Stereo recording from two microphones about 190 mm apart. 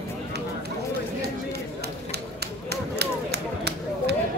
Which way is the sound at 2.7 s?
60° right (ahead or behind).